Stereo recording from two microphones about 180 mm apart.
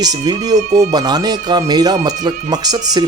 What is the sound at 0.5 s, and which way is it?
Speech, 40° right (ahead or behind).